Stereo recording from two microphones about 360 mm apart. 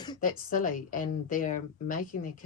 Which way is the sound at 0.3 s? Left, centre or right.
Left.